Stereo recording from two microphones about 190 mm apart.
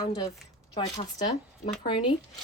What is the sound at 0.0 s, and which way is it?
Speech, 20° left (ahead or behind).